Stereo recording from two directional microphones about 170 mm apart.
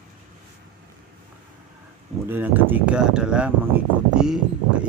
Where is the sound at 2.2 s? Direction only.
10° right (ahead or behind).